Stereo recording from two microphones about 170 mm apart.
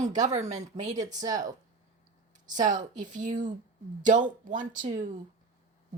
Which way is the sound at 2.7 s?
50° right (ahead or behind).